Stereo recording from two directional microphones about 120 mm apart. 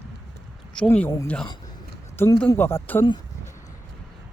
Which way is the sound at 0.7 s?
10° left (ahead or behind).